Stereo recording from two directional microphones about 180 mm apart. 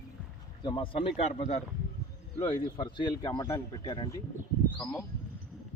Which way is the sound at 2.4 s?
25° left (ahead or behind).